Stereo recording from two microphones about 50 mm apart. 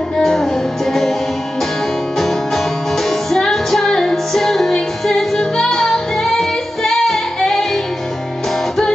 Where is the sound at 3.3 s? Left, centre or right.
Centre.